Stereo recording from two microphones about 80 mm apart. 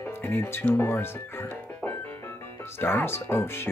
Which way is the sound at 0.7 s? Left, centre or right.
Left.